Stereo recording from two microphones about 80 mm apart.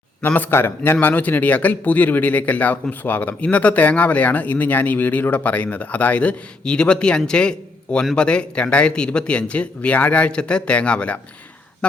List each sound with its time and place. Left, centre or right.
0.3 s speech: left